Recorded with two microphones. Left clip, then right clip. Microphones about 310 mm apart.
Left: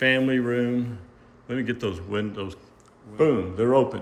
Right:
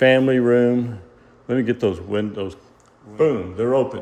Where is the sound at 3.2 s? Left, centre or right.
Centre.